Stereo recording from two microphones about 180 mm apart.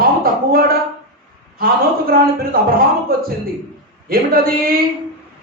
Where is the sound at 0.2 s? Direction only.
55° right (ahead or behind).